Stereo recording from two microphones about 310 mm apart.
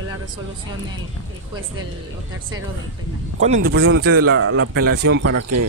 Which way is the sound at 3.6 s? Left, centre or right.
Right.